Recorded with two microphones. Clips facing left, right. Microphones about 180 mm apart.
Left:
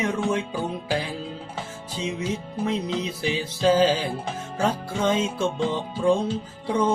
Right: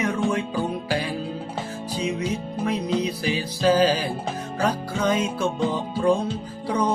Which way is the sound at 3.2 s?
25° left (ahead or behind).